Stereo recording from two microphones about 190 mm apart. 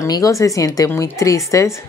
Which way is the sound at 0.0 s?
15° left (ahead or behind).